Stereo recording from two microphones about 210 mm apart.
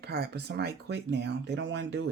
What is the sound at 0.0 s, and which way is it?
Speech, 50° right (ahead or behind).